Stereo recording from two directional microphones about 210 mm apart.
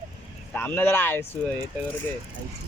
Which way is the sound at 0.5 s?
10° left (ahead or behind).